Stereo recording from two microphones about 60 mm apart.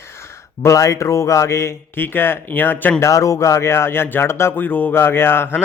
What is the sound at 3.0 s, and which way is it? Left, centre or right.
Speech, left.